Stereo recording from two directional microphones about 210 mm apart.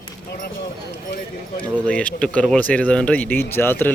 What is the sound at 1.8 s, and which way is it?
Speech, 5° left (ahead or behind).